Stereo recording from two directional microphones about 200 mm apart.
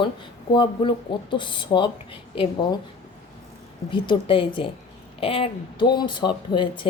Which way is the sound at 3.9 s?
25° left (ahead or behind).